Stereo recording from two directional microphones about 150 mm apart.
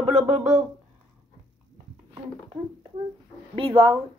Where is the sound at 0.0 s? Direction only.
45° right (ahead or behind).